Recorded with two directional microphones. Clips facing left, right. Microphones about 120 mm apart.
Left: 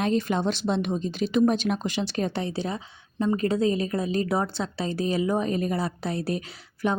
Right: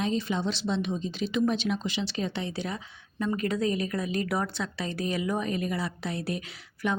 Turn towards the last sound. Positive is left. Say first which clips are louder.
# left 3 dB
turn(degrees=35)  # may be behind; listen again after turning